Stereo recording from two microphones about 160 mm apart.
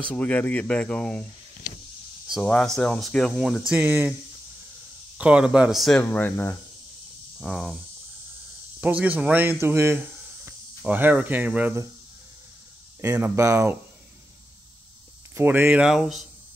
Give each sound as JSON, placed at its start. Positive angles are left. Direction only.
{"t": 0.1, "sound": "speech", "side_deg": 10}
{"t": 2.2, "sound": "a sound", "side_deg": 0}
{"t": 2.5, "sound": "speech", "side_deg": 5}
{"t": 3.7, "sound": "speech", "side_deg": -10}
{"t": 5.1, "sound": "speech", "side_deg": -5}
{"t": 7.3, "sound": "speech", "side_deg": 0}
{"t": 8.8, "sound": "speech", "side_deg": -10}
{"t": 13.0, "sound": "speech", "side_deg": -20}
{"t": 15.3, "sound": "speech", "side_deg": -15}